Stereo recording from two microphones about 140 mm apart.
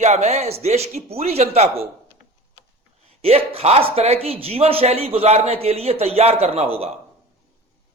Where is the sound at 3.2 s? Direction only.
45° right (ahead or behind).